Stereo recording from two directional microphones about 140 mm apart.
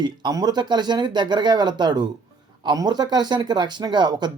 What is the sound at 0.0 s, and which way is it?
Speech, 30° right (ahead or behind).